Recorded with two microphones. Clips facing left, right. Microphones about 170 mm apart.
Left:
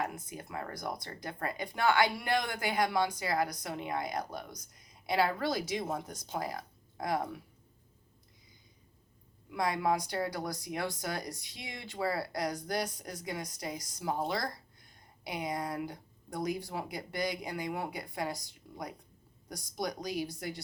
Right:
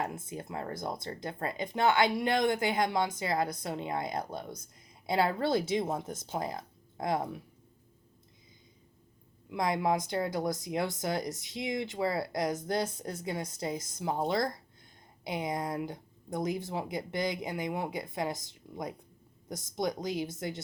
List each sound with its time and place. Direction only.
0.0 s speech: 25° right (ahead or behind)
9.5 s speech: 20° right (ahead or behind)